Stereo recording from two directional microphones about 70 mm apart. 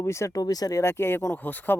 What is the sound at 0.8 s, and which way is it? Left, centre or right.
Speech, left.